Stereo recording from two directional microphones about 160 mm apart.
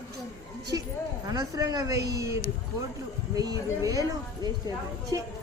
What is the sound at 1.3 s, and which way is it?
Speech, 25° right (ahead or behind).